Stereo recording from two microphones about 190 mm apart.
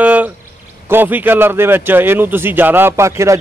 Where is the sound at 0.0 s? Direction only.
10° right (ahead or behind).